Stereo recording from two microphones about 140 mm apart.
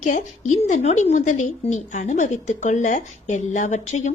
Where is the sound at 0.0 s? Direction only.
65° left (ahead or behind).